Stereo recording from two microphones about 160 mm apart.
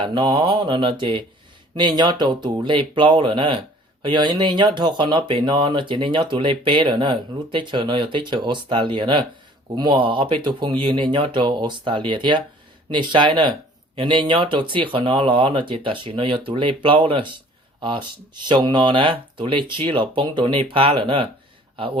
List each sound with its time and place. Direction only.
0.0 s speech: 30° right (ahead or behind)